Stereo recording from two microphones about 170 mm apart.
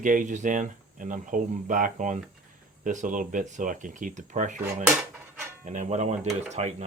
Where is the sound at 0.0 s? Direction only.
50° right (ahead or behind).